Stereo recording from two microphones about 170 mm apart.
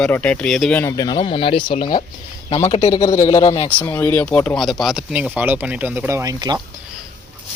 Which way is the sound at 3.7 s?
10° left (ahead or behind).